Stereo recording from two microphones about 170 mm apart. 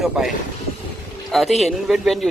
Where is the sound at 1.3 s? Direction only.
Centre (ahead or behind).